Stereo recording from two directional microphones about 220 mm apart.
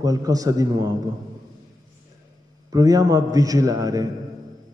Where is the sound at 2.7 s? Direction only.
15° right (ahead or behind).